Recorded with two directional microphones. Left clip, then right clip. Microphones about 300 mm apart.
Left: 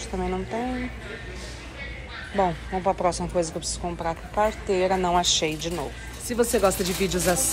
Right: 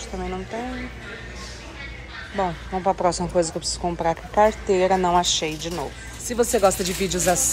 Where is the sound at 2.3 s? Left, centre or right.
Centre.